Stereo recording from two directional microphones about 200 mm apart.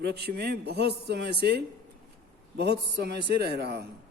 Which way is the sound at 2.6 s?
55° right (ahead or behind).